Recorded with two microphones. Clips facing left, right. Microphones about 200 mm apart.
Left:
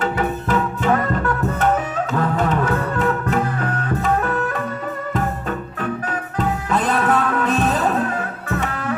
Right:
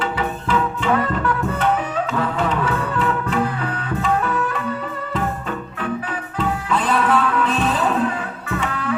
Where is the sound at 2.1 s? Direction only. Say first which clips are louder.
Left 3 dB; 45° left (ahead or behind).